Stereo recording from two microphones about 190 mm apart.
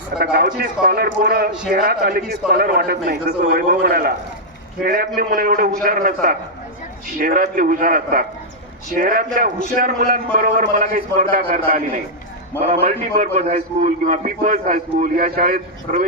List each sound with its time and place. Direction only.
0.2 s a man's voice: 50° right (ahead or behind)